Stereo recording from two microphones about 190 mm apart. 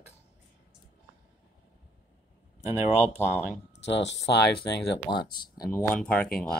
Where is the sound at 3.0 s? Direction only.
35° left (ahead or behind).